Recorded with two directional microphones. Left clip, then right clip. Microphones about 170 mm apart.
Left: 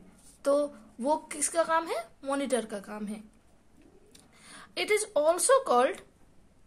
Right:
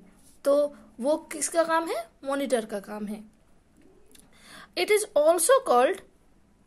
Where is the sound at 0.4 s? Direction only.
25° right (ahead or behind).